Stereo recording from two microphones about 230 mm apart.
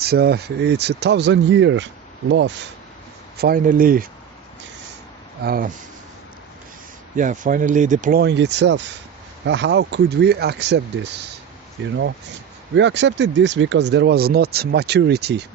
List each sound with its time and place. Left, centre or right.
0.0 s speech: right
3.3 s speech: right
5.4 s speech: right
7.2 s speech: right